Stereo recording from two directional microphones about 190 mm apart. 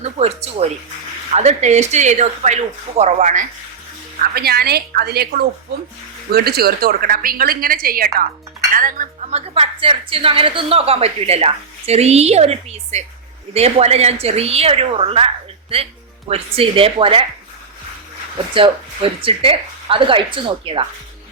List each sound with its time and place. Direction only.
0.0 s a woman's voice: 35° right (ahead or behind)
4.2 s a woman's voice: 55° right (ahead or behind)
8.7 s dishes: 45° right (ahead or behind)
9.6 s a woman's voice: 30° right (ahead or behind)
16.3 s speech: 30° right (ahead or behind)
18.5 s speech: 25° right (ahead or behind)